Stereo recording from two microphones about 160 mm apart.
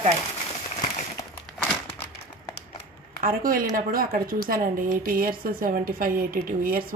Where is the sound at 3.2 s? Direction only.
60° right (ahead or behind).